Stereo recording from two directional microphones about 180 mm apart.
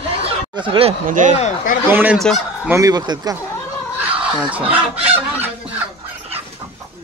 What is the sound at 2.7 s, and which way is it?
Fowl, 20° right (ahead or behind).